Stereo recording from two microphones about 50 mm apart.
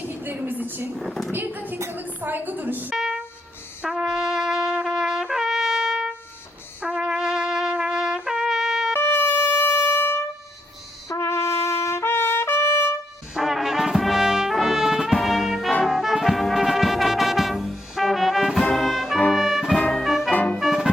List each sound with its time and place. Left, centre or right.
0.1 s a woman's voice: right
0.9 s a woman's voice: centre
1.3 s a woman's voice: right
2.9 s speech: centre
3.8 s brass instrument: centre
6.8 s trumpet: centre
8.9 s music: left
11.1 s trumpet: left
13.3 s brass instrument: centre
15.9 s music: centre
19.3 s brass instrument: centre
19.9 s music: centre
20.3 s music: left